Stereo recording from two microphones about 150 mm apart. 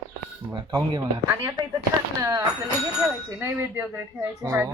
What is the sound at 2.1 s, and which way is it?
Speech, 25° right (ahead or behind).